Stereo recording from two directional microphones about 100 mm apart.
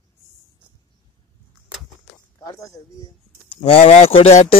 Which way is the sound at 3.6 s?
75° left (ahead or behind).